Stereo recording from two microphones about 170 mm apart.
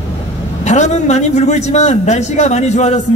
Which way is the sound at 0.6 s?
45° left (ahead or behind).